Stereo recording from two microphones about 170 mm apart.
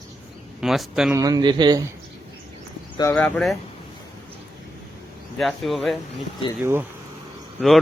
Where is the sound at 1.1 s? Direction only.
20° right (ahead or behind).